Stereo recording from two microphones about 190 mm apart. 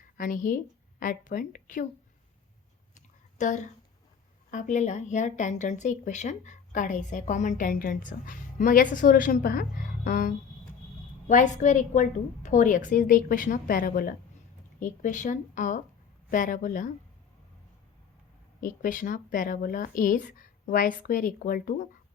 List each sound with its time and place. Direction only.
0.2 s a woman's voice: 45° left (ahead or behind)
2.9 s a sound: 40° left (ahead or behind)
4.5 s a woman's voice: 40° left (ahead or behind)
18.6 s speech: 45° left (ahead or behind)